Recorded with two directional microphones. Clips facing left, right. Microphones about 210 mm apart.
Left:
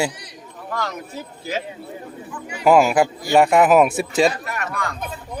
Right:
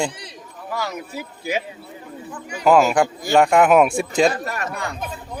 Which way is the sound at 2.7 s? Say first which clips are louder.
Left 1 dB; 10° left (ahead or behind).